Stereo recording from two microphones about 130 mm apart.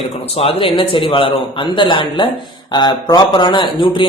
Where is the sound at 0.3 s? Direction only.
45° left (ahead or behind).